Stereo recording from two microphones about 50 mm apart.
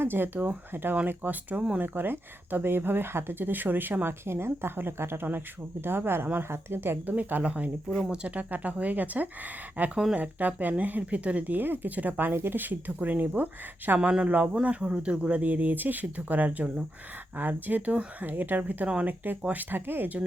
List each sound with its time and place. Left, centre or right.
0.0 s speech: right
4.0 s speech: right
7.1 s speech: right
7.9 s speech: centre
8.1 s speech: right
8.4 s speech: right
14.1 s speech: right
17.3 s speech: right